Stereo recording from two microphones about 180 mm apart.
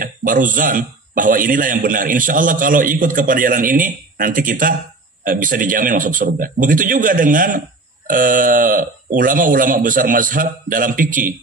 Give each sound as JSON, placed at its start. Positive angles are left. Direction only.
{"t": 0.0, "sound": "speech", "side_deg": -50}